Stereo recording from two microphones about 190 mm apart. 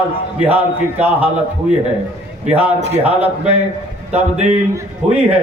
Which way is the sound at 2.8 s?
35° right (ahead or behind).